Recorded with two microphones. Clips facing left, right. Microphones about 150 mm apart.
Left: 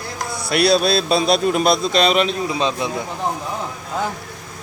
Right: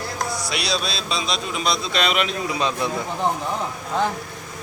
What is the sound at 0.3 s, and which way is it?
A man's voice, 55° left (ahead or behind).